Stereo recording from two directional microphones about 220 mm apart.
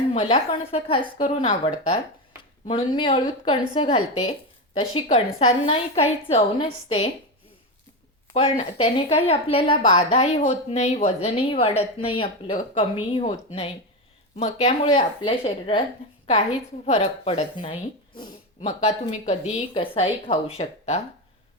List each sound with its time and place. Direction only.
0.1 s a woman's voice: 25° left (ahead or behind)
8.3 s a woman's voice: 30° left (ahead or behind)
16.8 s a woman's voice: 30° left (ahead or behind)
18.6 s a woman's voice: 35° left (ahead or behind)